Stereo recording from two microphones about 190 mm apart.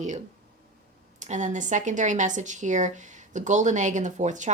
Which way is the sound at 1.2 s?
40° right (ahead or behind).